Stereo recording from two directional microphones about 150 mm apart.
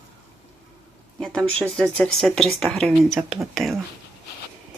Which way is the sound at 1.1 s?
5° left (ahead or behind).